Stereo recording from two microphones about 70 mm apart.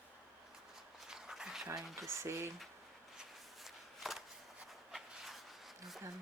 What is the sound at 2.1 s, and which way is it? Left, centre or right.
Speech, right.